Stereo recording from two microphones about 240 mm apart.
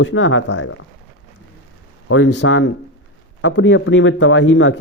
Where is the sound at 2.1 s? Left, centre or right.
Left.